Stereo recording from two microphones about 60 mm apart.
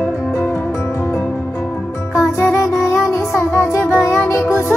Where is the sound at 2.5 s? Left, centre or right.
Left.